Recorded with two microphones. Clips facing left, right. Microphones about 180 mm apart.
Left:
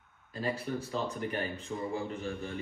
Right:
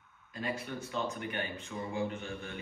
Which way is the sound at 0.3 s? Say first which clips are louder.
Left 4 dB; 35° left (ahead or behind).